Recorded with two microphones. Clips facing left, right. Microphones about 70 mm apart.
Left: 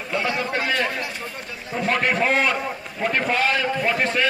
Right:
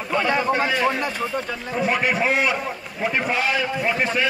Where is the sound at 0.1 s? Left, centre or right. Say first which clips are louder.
Right 3 dB; right.